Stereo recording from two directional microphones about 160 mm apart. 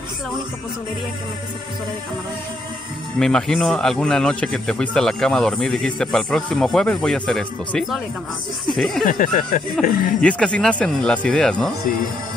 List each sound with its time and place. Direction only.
3.2 s speech: 5° left (ahead or behind)
9.0 s speech: 60° left (ahead or behind)
10.2 s speech: 5° left (ahead or behind)